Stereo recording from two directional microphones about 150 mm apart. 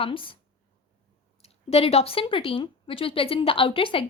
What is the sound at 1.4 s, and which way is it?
A woman's voice, 45° left (ahead or behind).